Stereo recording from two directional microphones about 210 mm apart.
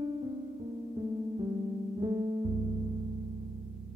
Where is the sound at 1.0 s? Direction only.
20° right (ahead or behind).